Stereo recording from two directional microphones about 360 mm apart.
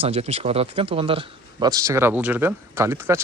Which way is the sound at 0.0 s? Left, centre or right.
Centre.